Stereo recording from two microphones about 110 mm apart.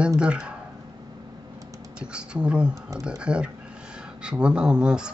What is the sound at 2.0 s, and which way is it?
Speech, 10° right (ahead or behind).